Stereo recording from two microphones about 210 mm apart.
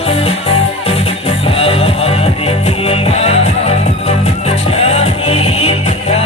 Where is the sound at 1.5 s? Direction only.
25° left (ahead or behind).